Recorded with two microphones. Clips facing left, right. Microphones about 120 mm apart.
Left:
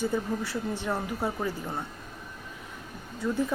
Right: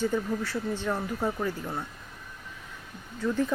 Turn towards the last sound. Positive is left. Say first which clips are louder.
# right 1 dB
turn(degrees=10)  # may be behind; listen again after turning